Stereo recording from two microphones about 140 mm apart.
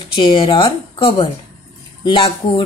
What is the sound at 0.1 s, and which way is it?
Speech, 35° left (ahead or behind).